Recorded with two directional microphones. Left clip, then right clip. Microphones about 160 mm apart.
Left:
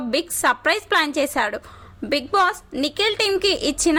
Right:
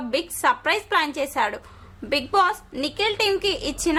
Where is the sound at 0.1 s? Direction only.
30° left (ahead or behind).